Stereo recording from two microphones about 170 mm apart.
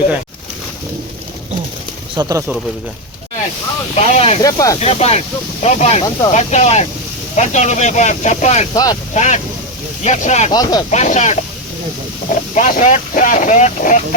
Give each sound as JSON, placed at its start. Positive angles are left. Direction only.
{"t": 2.2, "sound": "speech", "side_deg": -25}
{"t": 3.9, "sound": "speech", "side_deg": 35}
{"t": 4.4, "sound": "speech", "side_deg": 20}
{"t": 4.8, "sound": "speech", "side_deg": 40}
{"t": 8.7, "sound": "speech", "side_deg": 20}
{"t": 9.1, "sound": "speech", "side_deg": 45}
{"t": 10.5, "sound": "speech", "side_deg": 25}
{"t": 10.9, "sound": "speech", "side_deg": 45}